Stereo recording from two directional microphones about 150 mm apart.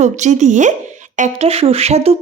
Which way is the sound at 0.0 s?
50° right (ahead or behind).